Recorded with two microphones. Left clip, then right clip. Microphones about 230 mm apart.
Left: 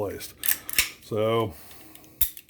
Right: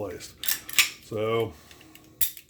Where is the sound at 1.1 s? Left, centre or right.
Left.